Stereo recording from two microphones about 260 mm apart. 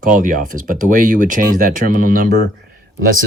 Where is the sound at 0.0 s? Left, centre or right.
Right.